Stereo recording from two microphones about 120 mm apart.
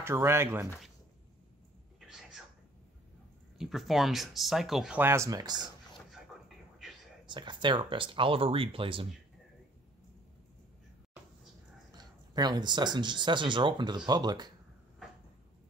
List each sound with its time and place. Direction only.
0.0 s speech: 20° right (ahead or behind)
2.0 s a sound: 5° right (ahead or behind)
3.5 s speech: centre (ahead or behind)
4.9 s speech: 20° right (ahead or behind)
7.2 s speech: 40° right (ahead or behind)
11.9 s speech: 35° right (ahead or behind)